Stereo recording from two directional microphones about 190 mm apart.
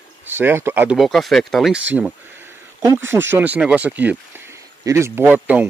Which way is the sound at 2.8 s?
10° right (ahead or behind).